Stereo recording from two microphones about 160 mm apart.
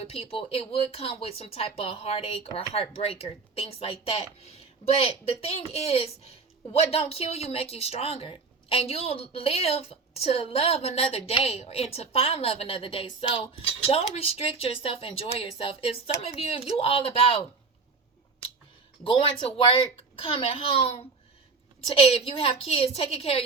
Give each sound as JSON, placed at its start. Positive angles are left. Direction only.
{"t": 0.0, "sound": "speech", "side_deg": 40}
{"t": 19.0, "sound": "speech", "side_deg": 35}
{"t": 22.1, "sound": "speech", "side_deg": 35}